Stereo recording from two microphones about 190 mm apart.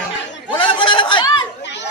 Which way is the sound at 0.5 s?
25° left (ahead or behind).